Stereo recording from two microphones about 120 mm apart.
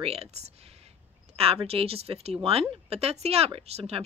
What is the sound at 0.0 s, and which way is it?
A woman's voice, 60° right (ahead or behind).